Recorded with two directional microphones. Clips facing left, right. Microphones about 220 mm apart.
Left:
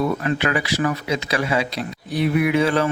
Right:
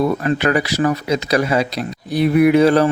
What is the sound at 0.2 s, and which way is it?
Speech, 40° right (ahead or behind).